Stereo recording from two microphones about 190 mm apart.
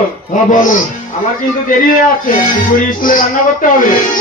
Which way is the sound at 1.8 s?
45° left (ahead or behind).